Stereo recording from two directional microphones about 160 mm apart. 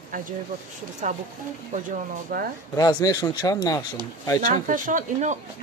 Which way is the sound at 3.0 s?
25° left (ahead or behind).